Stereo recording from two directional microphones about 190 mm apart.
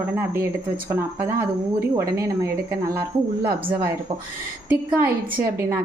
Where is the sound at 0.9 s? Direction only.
10° right (ahead or behind).